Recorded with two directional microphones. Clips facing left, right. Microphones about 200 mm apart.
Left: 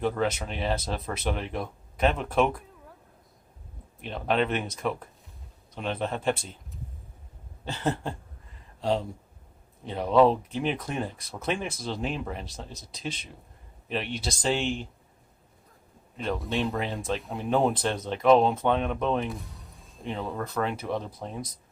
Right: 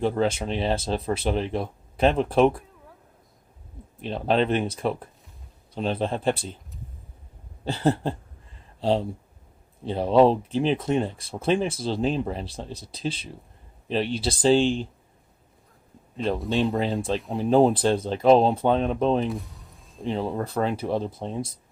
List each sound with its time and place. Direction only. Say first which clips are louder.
0.0 s speech: right 4 dB; 30° right (ahead or behind)
4.0 s speech: right 4 dB; 30° right (ahead or behind)
7.6 s speech: right 6 dB; 35° right (ahead or behind)
16.1 s speech: right 4 dB; 30° right (ahead or behind)
16.4 s speech: right 5 dB; centre (ahead or behind)
16.7 s speech: right 5 dB; 30° right (ahead or behind)
19.3 s a sound: right 6 dB; centre (ahead or behind)
20.1 s speech: right 5 dB; 30° right (ahead or behind)